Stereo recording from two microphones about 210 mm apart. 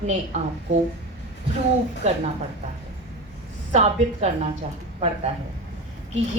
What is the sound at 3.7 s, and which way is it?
Speech, 30° right (ahead or behind).